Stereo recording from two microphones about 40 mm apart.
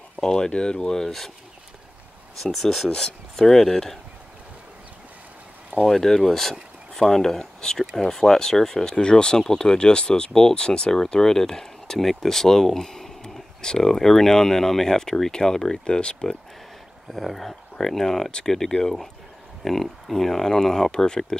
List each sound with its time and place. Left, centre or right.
0.2 s speech: centre
2.5 s speech: centre
2.9 s speech: centre
5.9 s speech: centre
15.8 s speech: left
17.1 s speech: centre